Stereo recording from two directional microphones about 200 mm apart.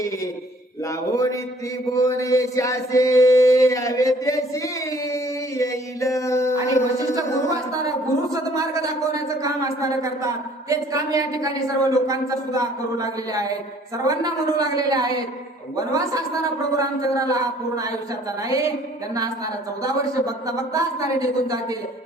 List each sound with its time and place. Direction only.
0.9 s speech: 15° left (ahead or behind)
1.9 s a sound: 15° left (ahead or behind)
7.2 s speech: 15° right (ahead or behind)
19.8 s speech: 15° right (ahead or behind)